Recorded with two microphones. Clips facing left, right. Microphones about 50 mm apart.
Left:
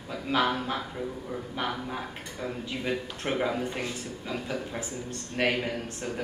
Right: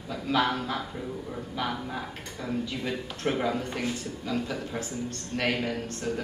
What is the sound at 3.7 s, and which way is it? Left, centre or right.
Speech, left.